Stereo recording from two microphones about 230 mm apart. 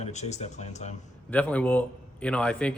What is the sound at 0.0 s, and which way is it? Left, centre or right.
Speech, left.